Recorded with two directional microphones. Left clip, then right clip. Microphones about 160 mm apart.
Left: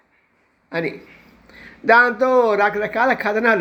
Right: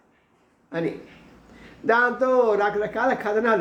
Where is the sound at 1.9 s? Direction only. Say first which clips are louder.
Left 6 dB; 25° left (ahead or behind).